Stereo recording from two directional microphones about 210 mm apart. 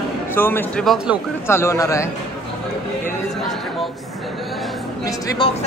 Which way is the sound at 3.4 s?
Centre (ahead or behind).